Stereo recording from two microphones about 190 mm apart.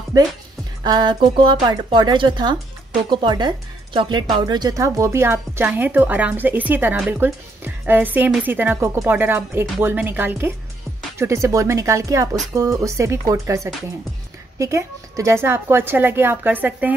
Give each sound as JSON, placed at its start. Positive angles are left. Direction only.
{"t": 0.1, "sound": "speech", "side_deg": -20}